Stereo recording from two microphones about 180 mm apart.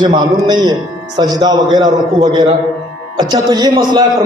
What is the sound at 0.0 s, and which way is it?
A man's voice, 25° right (ahead or behind).